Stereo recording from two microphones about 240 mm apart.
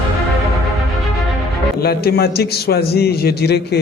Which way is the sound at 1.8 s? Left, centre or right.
Left.